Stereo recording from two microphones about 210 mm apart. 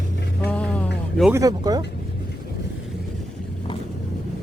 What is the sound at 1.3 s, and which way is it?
Speech, 15° right (ahead or behind).